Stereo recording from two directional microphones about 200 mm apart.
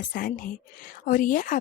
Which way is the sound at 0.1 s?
45° left (ahead or behind).